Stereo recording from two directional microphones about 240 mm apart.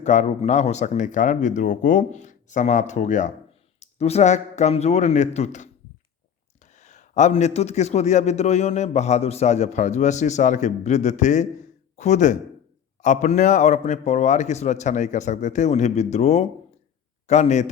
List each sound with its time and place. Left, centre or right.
0.0 s a man's voice: left
6.7 s a man's voice: left